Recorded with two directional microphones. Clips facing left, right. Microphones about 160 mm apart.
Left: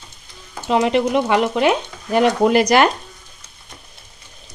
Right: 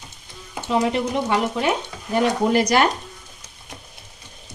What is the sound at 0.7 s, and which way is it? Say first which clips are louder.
Speech: left 5 dB; 85° left.